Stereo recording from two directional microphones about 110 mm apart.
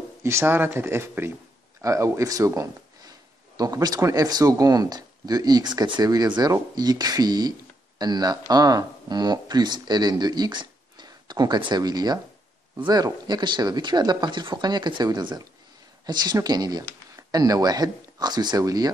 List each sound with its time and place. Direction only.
0.2 s speech: 25° right (ahead or behind)